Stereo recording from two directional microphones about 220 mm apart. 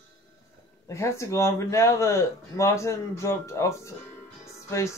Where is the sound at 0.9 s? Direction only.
15° left (ahead or behind).